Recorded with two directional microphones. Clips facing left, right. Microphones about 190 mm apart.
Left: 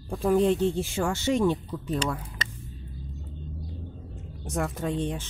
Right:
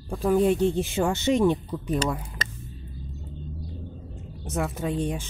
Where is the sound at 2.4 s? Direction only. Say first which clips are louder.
Right 2 dB; 40° right (ahead or behind).